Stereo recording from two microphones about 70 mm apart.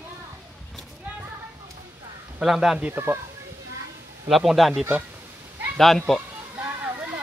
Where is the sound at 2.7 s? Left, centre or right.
Centre.